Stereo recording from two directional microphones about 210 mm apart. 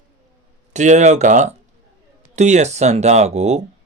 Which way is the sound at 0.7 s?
35° right (ahead or behind).